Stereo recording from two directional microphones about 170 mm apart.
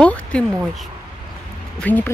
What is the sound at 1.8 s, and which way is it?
Speech, 10° left (ahead or behind).